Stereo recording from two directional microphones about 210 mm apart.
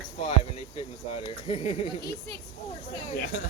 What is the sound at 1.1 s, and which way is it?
Speech, 30° left (ahead or behind).